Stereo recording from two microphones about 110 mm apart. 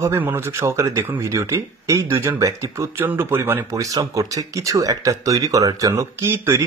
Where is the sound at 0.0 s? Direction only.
25° right (ahead or behind).